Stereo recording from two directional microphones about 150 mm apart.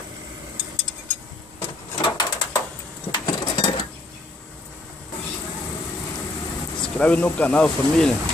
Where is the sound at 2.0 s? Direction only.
30° left (ahead or behind).